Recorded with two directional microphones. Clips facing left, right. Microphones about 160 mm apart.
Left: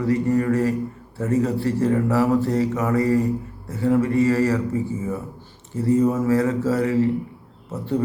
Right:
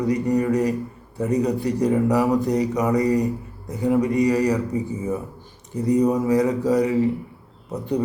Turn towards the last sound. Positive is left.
turn(degrees=-15)  # may be behind; listen again after turning